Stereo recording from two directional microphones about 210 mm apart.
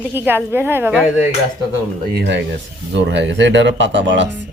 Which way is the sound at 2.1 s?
55° right (ahead or behind).